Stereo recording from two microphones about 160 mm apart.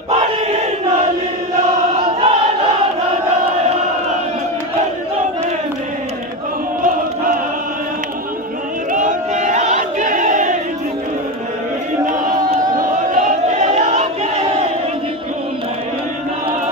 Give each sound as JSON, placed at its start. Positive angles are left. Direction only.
{"t": 2.0, "sound": "choir", "side_deg": -35}
{"t": 8.9, "sound": "battle cry", "side_deg": -50}
{"t": 12.1, "sound": "a sound", "side_deg": -55}